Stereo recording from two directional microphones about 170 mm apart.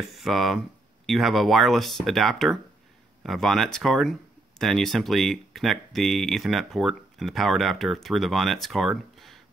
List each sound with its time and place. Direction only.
0.1 s speech: centre (ahead or behind)